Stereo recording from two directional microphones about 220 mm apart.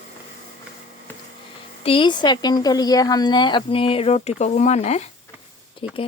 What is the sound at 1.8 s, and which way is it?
Speech, 20° left (ahead or behind).